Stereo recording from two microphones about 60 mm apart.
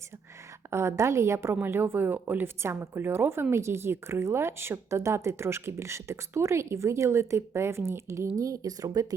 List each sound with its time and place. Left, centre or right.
0.7 s a woman's voice: right
1.6 s a woman's voice: right
8.4 s speech: right